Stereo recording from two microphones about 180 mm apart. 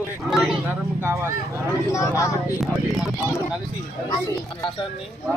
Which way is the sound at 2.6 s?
Centre (ahead or behind).